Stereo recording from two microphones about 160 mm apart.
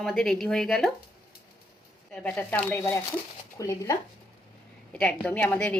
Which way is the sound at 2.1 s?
10° left (ahead or behind).